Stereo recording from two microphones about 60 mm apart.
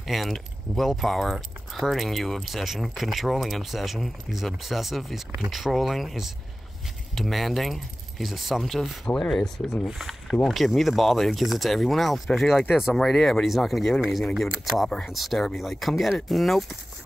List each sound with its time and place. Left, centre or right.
0.0 s speech: centre
9.0 s speech: centre
9.8 s speech: centre